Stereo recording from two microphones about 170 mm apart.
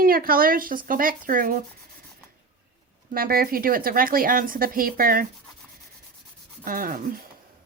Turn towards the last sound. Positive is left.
turn(degrees=-55)  # may be behind; listen again after turning